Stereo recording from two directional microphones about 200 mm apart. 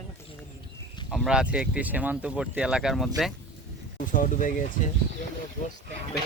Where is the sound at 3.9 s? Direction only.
40° left (ahead or behind).